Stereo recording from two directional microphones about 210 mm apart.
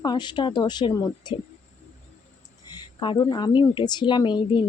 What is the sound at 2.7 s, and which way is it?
A woman's voice, 20° left (ahead or behind).